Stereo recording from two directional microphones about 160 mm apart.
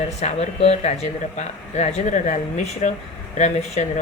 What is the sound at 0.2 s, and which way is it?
Speech, 40° left (ahead or behind).